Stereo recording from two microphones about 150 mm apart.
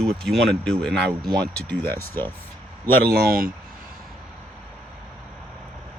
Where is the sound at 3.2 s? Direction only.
75° right (ahead or behind).